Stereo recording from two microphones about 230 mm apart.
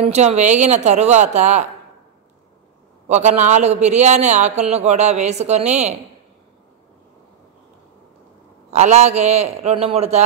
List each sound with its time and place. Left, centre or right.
0.1 s speech: right
3.1 s speech: right
8.6 s speech: right